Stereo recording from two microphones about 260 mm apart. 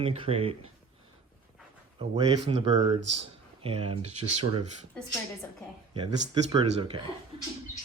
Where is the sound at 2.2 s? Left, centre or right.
Centre.